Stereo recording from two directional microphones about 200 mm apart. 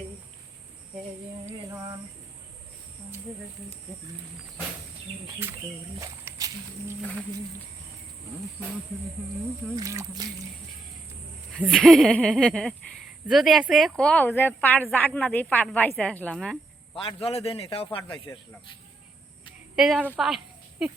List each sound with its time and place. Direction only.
1.5 s speech: 15° right (ahead or behind)
6.0 s speech: 15° right (ahead or behind)
7.0 s a woman's voice: 5° left (ahead or behind)
9.7 s speech: 15° right (ahead or behind)
11.6 s a woman's voice: 5° left (ahead or behind)
17.0 s a man's voice: 30° left (ahead or behind)
19.7 s speech: centre (ahead or behind)